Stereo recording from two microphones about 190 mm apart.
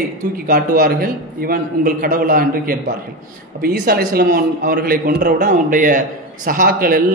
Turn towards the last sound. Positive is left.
turn(degrees=-50)  # may be behind; listen again after turning